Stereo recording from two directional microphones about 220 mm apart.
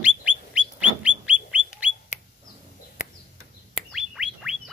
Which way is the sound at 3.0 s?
35° left (ahead or behind).